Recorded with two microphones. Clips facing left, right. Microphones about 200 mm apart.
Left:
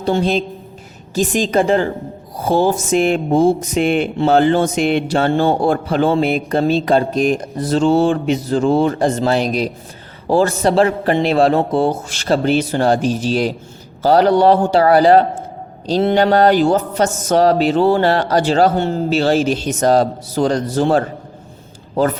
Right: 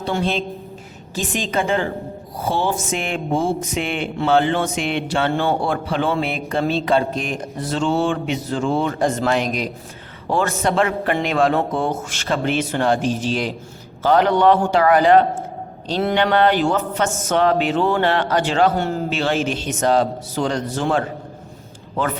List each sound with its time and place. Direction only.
1.4 s speech: 35° left (ahead or behind)